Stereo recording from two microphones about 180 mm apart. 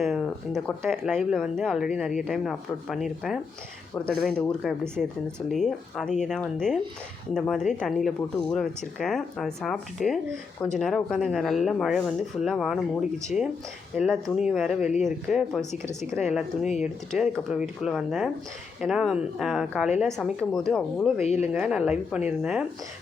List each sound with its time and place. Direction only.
0.0 s a sound: centre (ahead or behind)
0.9 s speech: centre (ahead or behind)
16.8 s speech: centre (ahead or behind)
21.2 s speech: 35° left (ahead or behind)
21.5 s speech: 5° right (ahead or behind)